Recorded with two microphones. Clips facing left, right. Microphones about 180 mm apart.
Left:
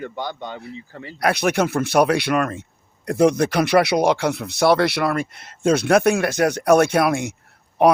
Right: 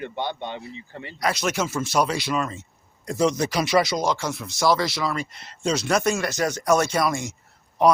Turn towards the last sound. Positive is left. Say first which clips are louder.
# left 3 dB
turn(degrees=60)  # may be behind; listen again after turning